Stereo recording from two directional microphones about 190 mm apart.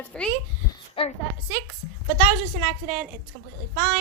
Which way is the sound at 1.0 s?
30° left (ahead or behind).